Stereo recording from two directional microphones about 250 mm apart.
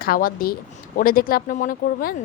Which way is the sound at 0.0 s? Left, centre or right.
Left.